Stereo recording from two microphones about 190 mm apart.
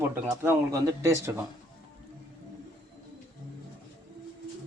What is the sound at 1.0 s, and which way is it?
Speech, 15° right (ahead or behind).